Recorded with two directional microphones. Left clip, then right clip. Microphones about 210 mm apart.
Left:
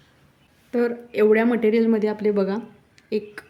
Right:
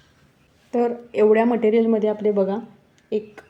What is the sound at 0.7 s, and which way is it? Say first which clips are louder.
A woman's voice: right 1 dB; 15° left (ahead or behind).